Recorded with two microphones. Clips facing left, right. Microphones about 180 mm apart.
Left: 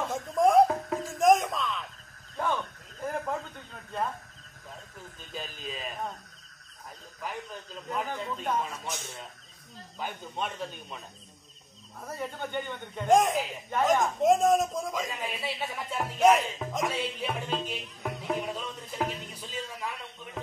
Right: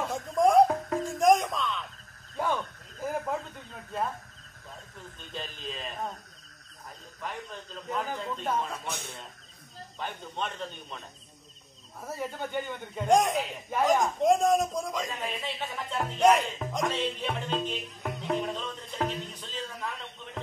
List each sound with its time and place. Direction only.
0.1 s music: centre (ahead or behind)
1.2 s a sound: centre (ahead or behind)
5.3 s a man's voice: 5° left (ahead or behind)
7.2 s a man's voice: 5° left (ahead or behind)
8.8 s speech: 60° right (ahead or behind)
9.9 s a man's voice: 5° left (ahead or behind)